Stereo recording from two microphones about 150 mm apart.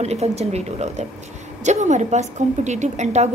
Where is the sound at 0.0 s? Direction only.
45° right (ahead or behind).